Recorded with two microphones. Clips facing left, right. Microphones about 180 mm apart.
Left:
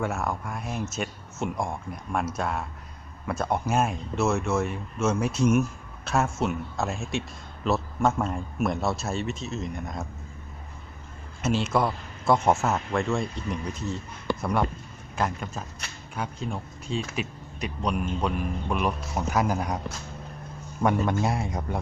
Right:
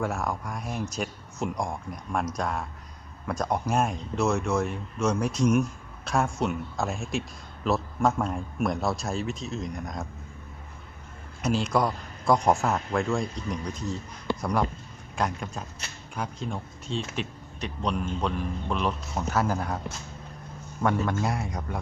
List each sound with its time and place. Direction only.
0.0 s a man's voice: 5° left (ahead or behind)
11.4 s a man's voice: centre (ahead or behind)
15.1 s a man's voice: centre (ahead or behind)
20.8 s a man's voice: 20° left (ahead or behind)